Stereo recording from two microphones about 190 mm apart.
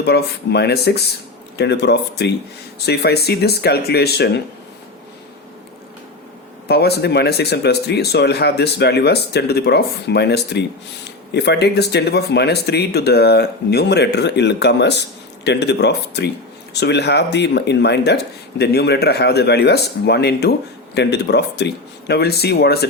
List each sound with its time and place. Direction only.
0.0 s speech: 60° left (ahead or behind)
6.7 s speech: 60° left (ahead or behind)